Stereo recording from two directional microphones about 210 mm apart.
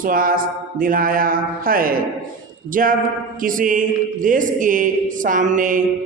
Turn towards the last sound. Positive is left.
turn(degrees=-40)  # may be behind; listen again after turning